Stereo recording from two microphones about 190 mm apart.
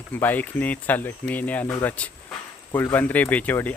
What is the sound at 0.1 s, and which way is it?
Speech, 10° left (ahead or behind).